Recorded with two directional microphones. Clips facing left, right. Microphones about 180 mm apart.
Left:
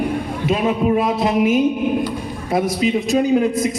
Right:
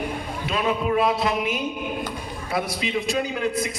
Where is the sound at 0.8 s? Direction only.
45° left (ahead or behind).